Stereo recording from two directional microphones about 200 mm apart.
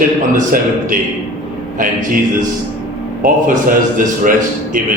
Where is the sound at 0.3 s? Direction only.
40° right (ahead or behind).